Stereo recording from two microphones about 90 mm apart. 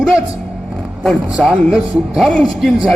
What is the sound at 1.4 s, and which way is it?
Speech, 5° right (ahead or behind).